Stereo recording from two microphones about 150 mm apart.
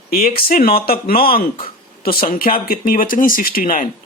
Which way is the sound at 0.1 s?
75° left (ahead or behind).